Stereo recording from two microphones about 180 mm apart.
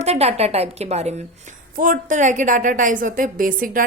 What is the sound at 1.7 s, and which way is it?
A woman's voice, 50° right (ahead or behind).